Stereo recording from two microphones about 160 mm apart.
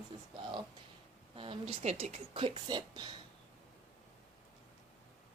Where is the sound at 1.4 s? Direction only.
35° right (ahead or behind).